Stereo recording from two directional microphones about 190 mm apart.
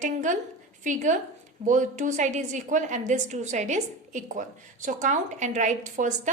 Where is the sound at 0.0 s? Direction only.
40° right (ahead or behind).